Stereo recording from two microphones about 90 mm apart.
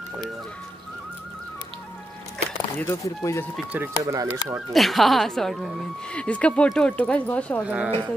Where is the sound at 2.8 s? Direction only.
35° left (ahead or behind).